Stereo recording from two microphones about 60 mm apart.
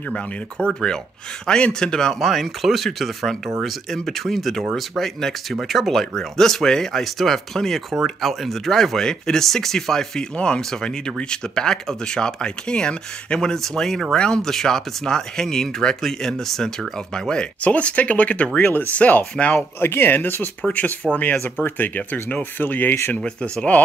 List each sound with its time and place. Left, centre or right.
0.1 s speech: centre
19.8 s speech: left
20.6 s speech: left
23.2 s speech: centre